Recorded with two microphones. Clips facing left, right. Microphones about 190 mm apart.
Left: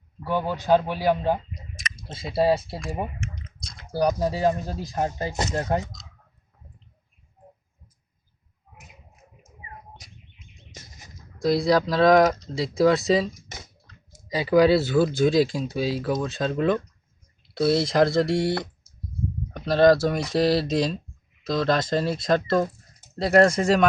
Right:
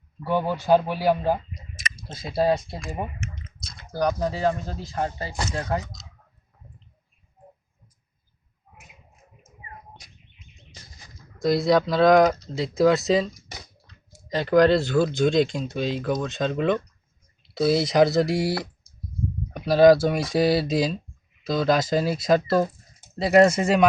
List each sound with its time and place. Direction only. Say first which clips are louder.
0.3 s speech: right 1 dB; 15° right (ahead or behind)
3.9 s speech: left 1 dB; 10° left (ahead or behind)
11.4 s speech: right 1 dB; centre (ahead or behind)